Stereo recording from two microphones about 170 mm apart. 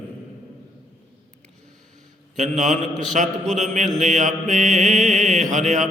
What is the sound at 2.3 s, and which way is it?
Mantra, 45° right (ahead or behind).